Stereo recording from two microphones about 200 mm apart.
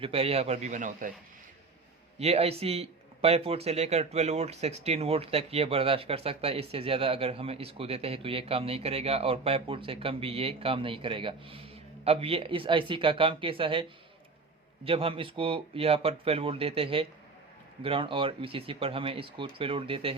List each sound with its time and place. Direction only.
0.0 s a man's voice: 30° right (ahead or behind)
2.1 s speech: 30° right (ahead or behind)
14.8 s speech: 30° right (ahead or behind)